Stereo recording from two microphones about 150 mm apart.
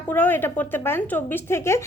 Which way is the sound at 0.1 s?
10° left (ahead or behind).